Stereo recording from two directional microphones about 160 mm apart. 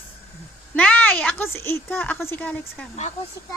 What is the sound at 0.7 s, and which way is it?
A woman's voice, 10° left (ahead or behind).